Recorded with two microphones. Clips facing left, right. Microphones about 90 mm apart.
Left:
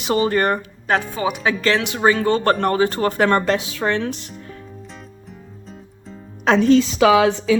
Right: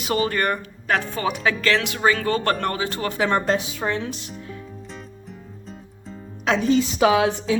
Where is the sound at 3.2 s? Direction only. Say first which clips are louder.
Left 2 dB; 75° left (ahead or behind); by 4.3 s 55° left (ahead or behind).